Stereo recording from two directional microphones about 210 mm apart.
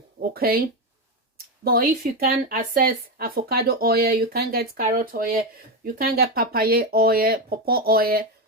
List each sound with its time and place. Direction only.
0.2 s speech: 45° right (ahead or behind)
1.6 s speech: 45° right (ahead or behind)